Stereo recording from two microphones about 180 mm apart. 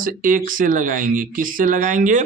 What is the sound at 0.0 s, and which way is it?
Speech, 50° right (ahead or behind).